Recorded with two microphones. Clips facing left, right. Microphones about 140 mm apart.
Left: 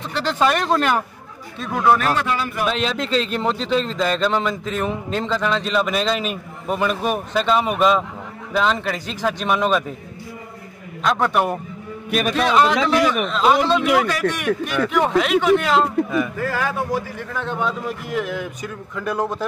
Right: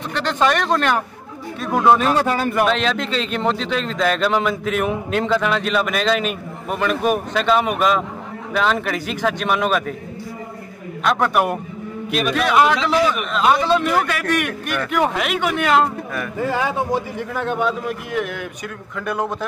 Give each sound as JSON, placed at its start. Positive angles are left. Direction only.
{"t": 0.1, "sound": "speech", "side_deg": 5}
{"t": 1.6, "sound": "speech", "side_deg": -15}
{"t": 2.1, "sound": "speech", "side_deg": -45}
{"t": 2.8, "sound": "speech", "side_deg": 0}
{"t": 11.1, "sound": "speech", "side_deg": -5}
{"t": 16.3, "sound": "a man's voice", "side_deg": -20}
{"t": 17.3, "sound": "speech", "side_deg": -5}